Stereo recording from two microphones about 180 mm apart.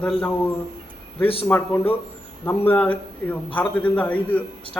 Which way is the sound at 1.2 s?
30° left (ahead or behind).